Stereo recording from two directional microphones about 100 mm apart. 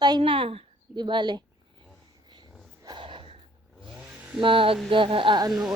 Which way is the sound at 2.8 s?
55° right (ahead or behind).